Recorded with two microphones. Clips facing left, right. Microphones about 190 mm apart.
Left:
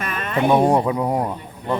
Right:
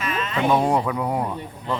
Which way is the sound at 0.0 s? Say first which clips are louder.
Left 2 dB; 55° left (ahead or behind).